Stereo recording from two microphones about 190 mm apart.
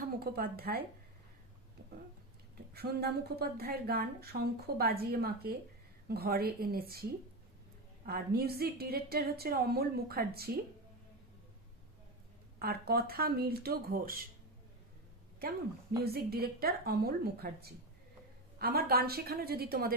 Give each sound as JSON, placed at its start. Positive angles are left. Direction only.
{"t": 0.0, "sound": "speech", "side_deg": -50}
{"t": 2.7, "sound": "speech", "side_deg": -55}
{"t": 8.0, "sound": "speech", "side_deg": -55}
{"t": 12.5, "sound": "speech", "side_deg": -55}
{"t": 16.0, "sound": "speech", "side_deg": -55}